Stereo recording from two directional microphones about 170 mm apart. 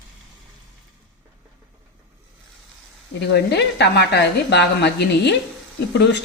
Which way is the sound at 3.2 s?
80° left.